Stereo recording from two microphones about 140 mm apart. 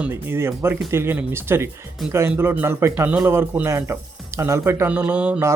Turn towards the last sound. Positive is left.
turn(degrees=-10)  # may be behind; listen again after turning